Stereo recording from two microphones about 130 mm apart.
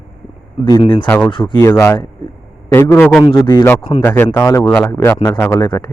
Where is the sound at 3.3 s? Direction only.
35° left (ahead or behind).